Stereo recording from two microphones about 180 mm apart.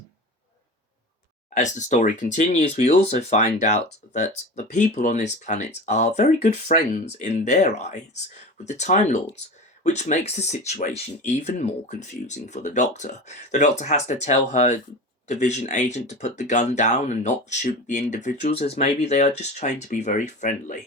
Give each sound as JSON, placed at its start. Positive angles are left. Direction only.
{"t": 1.5, "sound": "speech", "side_deg": 40}